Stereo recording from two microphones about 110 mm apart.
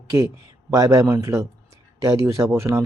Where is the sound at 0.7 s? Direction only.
30° right (ahead or behind).